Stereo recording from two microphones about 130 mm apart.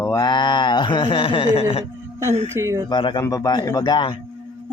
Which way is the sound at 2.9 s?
35° left (ahead or behind).